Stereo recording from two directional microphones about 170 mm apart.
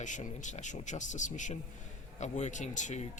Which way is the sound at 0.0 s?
45° left (ahead or behind).